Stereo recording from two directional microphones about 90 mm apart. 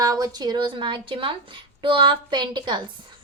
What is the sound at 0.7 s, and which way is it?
A woman's voice, 65° right (ahead or behind).